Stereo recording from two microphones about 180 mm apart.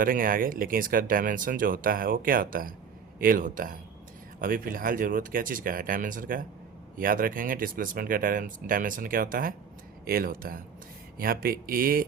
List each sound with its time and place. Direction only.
0.0 s speech: 50° right (ahead or behind)